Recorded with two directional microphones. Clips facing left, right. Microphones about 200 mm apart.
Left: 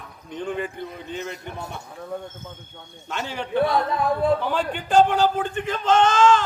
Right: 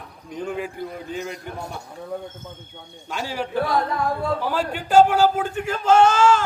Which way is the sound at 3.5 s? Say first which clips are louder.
Left 2 dB; 25° left (ahead or behind).